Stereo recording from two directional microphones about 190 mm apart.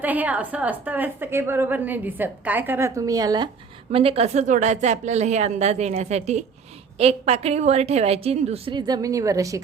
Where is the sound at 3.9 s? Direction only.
30° right (ahead or behind).